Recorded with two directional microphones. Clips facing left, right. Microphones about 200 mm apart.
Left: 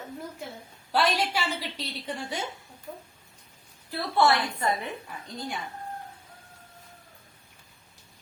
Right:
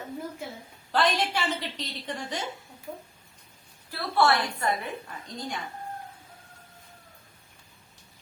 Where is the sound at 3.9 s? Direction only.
20° left (ahead or behind).